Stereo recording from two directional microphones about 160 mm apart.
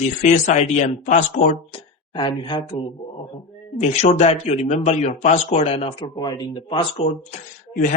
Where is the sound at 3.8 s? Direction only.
45° left (ahead or behind).